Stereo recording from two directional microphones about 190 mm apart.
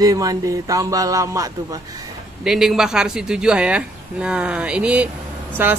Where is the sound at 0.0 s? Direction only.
20° right (ahead or behind).